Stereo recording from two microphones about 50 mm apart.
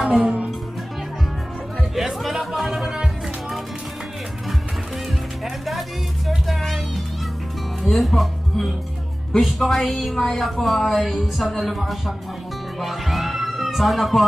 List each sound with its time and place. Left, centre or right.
0.1 s music: right
1.8 s music: centre
5.4 s music: centre
7.8 s speech: centre
12.8 s music: centre